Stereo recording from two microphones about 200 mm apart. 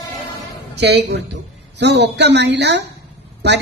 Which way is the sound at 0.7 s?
55° right (ahead or behind).